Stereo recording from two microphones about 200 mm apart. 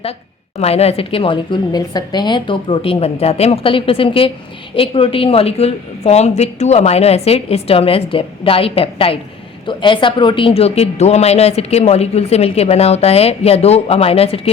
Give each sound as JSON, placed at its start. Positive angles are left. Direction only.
{"t": 0.6, "sound": "speech", "side_deg": 30}